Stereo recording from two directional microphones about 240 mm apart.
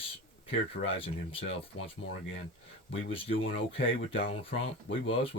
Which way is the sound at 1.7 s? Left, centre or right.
Left.